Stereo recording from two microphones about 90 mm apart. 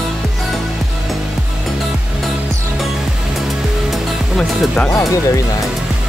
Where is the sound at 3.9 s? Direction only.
10° left (ahead or behind).